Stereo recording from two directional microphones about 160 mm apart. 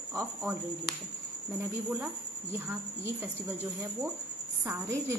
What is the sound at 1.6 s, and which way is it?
Speech, 15° right (ahead or behind).